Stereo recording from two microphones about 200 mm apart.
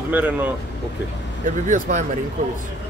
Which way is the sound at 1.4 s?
40° right (ahead or behind).